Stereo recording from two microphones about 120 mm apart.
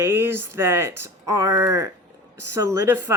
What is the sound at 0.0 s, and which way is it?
Speech, 20° right (ahead or behind).